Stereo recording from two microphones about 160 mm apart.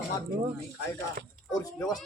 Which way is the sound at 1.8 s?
5° left (ahead or behind).